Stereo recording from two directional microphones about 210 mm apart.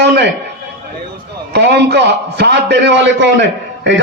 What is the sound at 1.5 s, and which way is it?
A man's voice, 50° right (ahead or behind).